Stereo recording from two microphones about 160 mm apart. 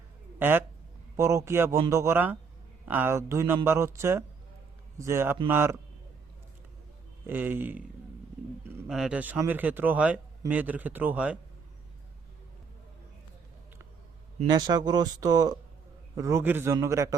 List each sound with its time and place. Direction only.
0.3 s speech: 15° right (ahead or behind)
7.3 s speech: 10° right (ahead or behind)
8.9 s speech: 5° right (ahead or behind)
14.4 s speech: 25° right (ahead or behind)